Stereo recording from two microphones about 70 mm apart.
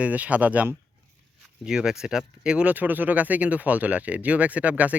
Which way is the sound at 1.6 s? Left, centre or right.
Centre.